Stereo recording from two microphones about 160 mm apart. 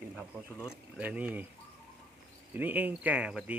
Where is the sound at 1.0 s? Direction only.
10° right (ahead or behind).